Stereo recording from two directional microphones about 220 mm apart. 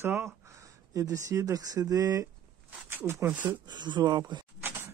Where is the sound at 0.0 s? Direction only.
10° right (ahead or behind).